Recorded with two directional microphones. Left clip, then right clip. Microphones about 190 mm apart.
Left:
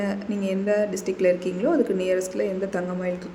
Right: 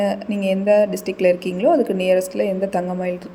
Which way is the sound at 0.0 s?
20° right (ahead or behind).